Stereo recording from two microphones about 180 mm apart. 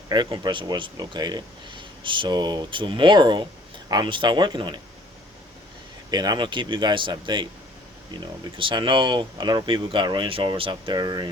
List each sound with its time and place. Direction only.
0.1 s speech: 25° right (ahead or behind)
6.1 s speech: 20° right (ahead or behind)